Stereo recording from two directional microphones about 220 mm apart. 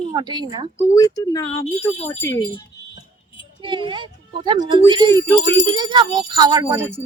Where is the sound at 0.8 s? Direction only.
15° left (ahead or behind).